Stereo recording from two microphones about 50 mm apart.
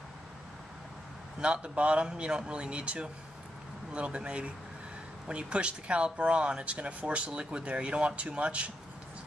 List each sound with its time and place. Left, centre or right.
1.4 s speech: right